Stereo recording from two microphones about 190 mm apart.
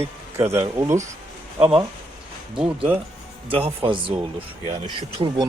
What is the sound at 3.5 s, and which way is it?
Speech, 30° right (ahead or behind).